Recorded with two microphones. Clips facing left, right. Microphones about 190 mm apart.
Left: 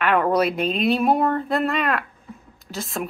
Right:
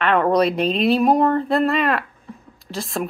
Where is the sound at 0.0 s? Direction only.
5° left (ahead or behind).